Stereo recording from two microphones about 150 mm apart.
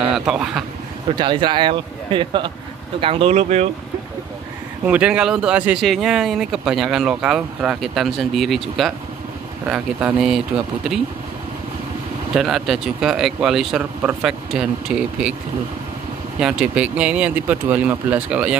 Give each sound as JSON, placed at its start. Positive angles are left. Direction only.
{"t": 0.0, "sound": "a man's voice", "side_deg": -5}
{"t": 1.1, "sound": "speech", "side_deg": -30}
{"t": 4.8, "sound": "speech", "side_deg": -10}
{"t": 12.4, "sound": "speech", "side_deg": 0}
{"t": 16.3, "sound": "speech", "side_deg": -5}